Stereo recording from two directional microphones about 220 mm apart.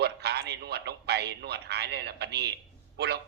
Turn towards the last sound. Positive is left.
turn(degrees=-50)  # may be behind; listen again after turning